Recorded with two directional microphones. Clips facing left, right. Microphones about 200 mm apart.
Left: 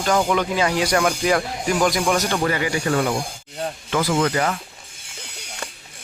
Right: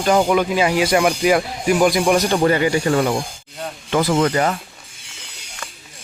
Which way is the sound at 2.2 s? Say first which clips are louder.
Right 6 dB; 30° right (ahead or behind).